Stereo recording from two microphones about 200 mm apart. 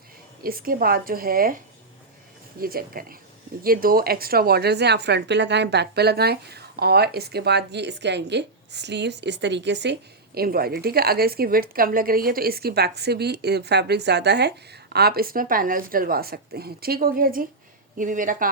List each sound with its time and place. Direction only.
0.4 s a woman's voice: 45° right (ahead or behind)